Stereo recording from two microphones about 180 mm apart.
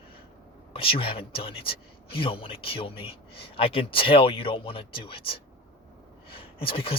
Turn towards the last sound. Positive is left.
turn(degrees=30)  # may be behind; listen again after turning